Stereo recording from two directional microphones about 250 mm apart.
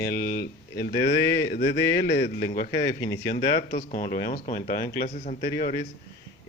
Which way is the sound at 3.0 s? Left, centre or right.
Centre.